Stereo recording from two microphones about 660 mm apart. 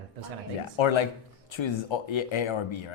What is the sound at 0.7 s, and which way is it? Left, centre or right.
Speech, left.